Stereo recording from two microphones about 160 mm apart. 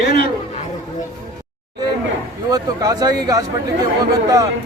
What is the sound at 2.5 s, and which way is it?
Speech, 25° right (ahead or behind).